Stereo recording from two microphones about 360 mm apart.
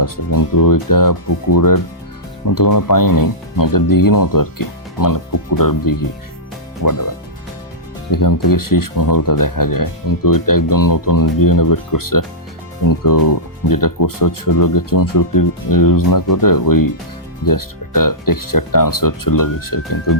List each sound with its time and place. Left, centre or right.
0.0 s speech: left
8.1 s speech: left